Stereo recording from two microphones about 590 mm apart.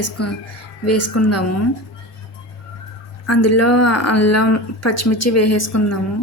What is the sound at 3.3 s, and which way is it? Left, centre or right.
Speech, left.